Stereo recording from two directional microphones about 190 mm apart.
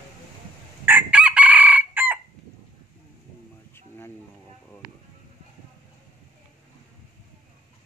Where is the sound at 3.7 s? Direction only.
10° left (ahead or behind).